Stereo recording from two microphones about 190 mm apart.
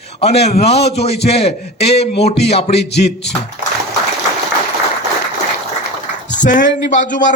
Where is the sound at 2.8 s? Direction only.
60° left (ahead or behind).